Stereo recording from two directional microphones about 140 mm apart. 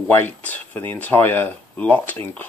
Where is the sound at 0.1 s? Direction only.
15° left (ahead or behind).